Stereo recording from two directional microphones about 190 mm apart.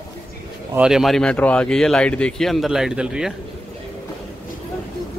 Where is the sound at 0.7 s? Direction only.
5° right (ahead or behind).